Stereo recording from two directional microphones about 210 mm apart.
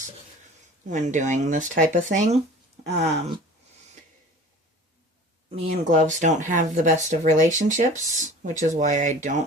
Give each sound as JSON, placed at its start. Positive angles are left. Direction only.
{"t": 0.9, "sound": "speech", "side_deg": -35}
{"t": 5.6, "sound": "speech", "side_deg": -35}